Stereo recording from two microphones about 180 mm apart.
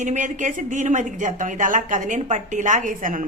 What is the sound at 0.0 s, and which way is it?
A woman's voice, 45° right (ahead or behind).